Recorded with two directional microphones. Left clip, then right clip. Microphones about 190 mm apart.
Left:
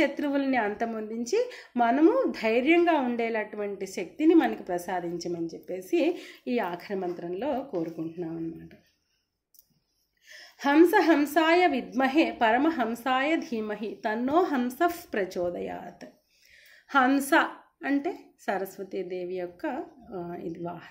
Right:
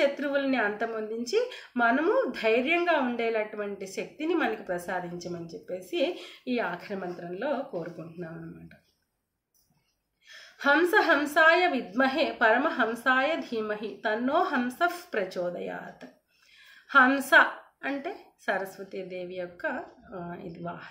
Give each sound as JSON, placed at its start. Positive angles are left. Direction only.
{"t": 0.0, "sound": "a woman's voice", "side_deg": 45}
{"t": 10.3, "sound": "a woman's voice", "side_deg": 50}